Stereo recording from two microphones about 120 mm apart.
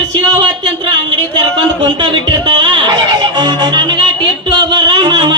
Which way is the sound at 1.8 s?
40° right (ahead or behind).